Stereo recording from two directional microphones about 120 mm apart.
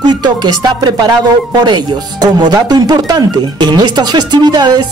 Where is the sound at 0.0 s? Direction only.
35° right (ahead or behind).